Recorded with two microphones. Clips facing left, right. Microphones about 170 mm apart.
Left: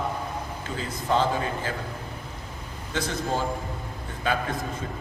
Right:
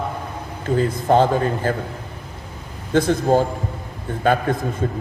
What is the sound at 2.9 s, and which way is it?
A man's voice, 50° right (ahead or behind).